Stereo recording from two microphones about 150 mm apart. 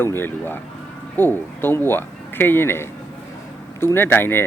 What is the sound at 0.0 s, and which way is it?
Speech, 15° left (ahead or behind).